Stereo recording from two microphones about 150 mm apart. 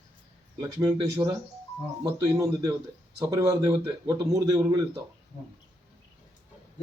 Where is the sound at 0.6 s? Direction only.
25° right (ahead or behind).